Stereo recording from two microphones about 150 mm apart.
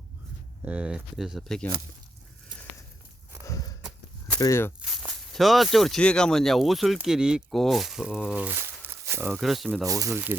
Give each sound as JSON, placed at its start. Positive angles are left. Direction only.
{"t": 0.6, "sound": "speech", "side_deg": -5}
{"t": 3.4, "sound": "walk", "side_deg": 25}
{"t": 4.4, "sound": "speech", "side_deg": 20}
{"t": 4.8, "sound": "speech", "side_deg": 0}
{"t": 9.4, "sound": "speech", "side_deg": 0}
{"t": 9.8, "sound": "speech", "side_deg": -25}